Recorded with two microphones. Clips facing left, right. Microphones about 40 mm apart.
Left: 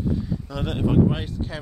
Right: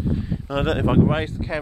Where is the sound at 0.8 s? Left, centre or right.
Right.